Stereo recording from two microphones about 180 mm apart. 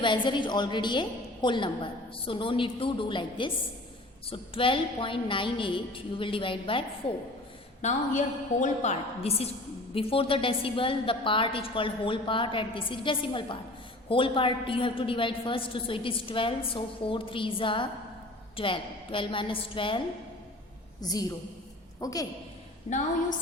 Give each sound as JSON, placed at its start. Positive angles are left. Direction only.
{"t": 0.0, "sound": "a woman's voice", "side_deg": 25}
{"t": 7.8, "sound": "a woman's voice", "side_deg": 40}
{"t": 21.0, "sound": "a woman's voice", "side_deg": 20}
{"t": 22.9, "sound": "a woman's voice", "side_deg": 35}